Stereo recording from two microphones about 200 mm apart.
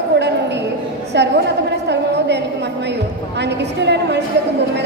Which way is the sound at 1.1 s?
60° right (ahead or behind).